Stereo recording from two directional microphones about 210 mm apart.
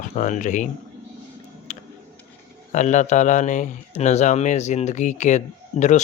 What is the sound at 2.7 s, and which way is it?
Speech, 35° left (ahead or behind).